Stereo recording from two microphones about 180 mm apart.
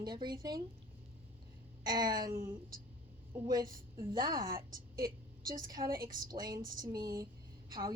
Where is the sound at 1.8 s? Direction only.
25° right (ahead or behind).